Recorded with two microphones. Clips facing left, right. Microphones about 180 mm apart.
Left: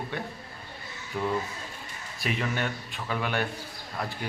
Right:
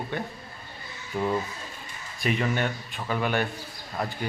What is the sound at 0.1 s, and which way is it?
Speech, centre (ahead or behind).